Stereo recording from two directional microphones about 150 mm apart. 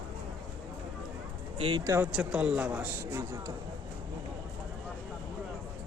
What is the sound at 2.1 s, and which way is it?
Speech, 5° right (ahead or behind).